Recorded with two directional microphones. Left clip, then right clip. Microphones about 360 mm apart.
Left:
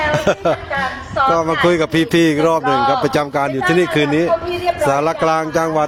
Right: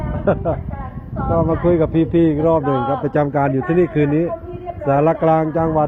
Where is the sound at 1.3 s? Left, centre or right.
Left.